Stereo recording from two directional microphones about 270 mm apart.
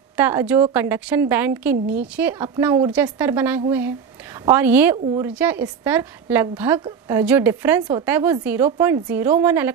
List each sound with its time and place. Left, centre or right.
0.2 s a woman's voice: centre